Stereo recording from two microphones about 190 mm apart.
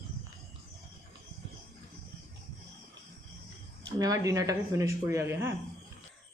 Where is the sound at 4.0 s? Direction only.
20° right (ahead or behind).